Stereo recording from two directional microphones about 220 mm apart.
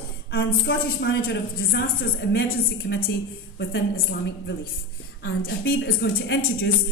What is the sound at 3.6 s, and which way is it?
A woman's voice, 55° left (ahead or behind).